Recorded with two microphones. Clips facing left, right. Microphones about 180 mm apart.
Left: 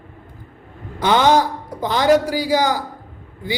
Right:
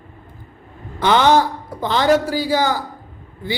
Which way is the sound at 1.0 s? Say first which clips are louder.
Right 1 dB; 15° left (ahead or behind).